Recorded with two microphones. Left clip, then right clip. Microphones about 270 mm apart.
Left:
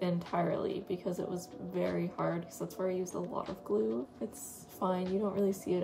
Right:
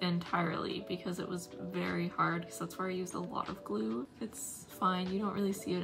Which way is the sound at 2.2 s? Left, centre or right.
Right.